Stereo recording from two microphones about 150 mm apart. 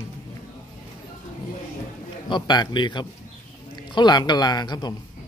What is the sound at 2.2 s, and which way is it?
Speech, 30° left (ahead or behind).